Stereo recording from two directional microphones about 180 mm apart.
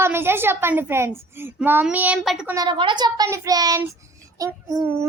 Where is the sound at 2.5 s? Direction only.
25° right (ahead or behind).